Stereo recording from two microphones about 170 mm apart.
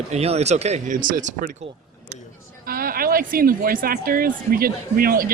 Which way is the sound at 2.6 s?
60° right (ahead or behind).